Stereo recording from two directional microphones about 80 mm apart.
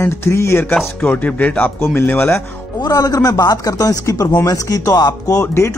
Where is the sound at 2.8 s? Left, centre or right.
Left.